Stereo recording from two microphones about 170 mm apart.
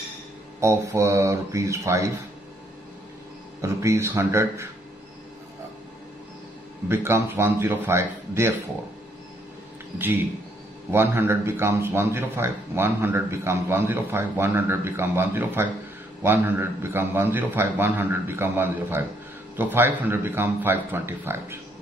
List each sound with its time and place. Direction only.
0.6 s speech: 15° right (ahead or behind)
3.6 s speech: 15° right (ahead or behind)
6.9 s speech: 15° right (ahead or behind)
9.9 s speech: 10° right (ahead or behind)